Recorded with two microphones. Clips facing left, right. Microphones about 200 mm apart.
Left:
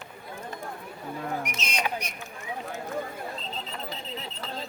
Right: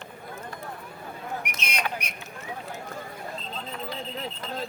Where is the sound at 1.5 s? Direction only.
60° right (ahead or behind).